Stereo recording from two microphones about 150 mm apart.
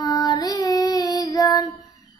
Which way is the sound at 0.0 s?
25° left (ahead or behind).